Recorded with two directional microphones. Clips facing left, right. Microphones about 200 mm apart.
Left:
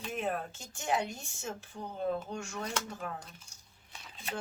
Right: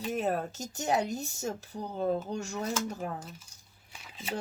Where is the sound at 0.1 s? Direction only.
40° right (ahead or behind).